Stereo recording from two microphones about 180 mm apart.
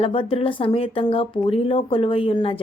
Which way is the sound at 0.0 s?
30° left (ahead or behind).